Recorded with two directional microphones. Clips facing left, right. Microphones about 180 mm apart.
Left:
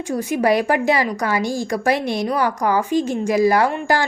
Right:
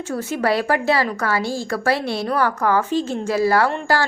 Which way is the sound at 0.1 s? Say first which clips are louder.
Left 3 dB; 15° left (ahead or behind).